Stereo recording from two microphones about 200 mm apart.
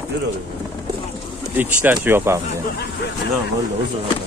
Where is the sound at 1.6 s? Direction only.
10° right (ahead or behind).